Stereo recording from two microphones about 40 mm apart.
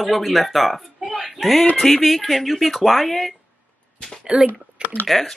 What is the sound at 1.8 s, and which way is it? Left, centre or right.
Speech, centre.